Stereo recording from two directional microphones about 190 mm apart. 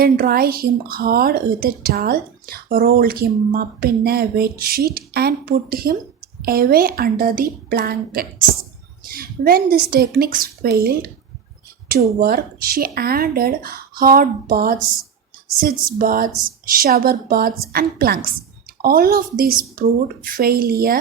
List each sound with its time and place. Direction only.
0.0 s speech: 50° right (ahead or behind)
12.2 s speech: 50° right (ahead or behind)
16.0 s speech: 50° right (ahead or behind)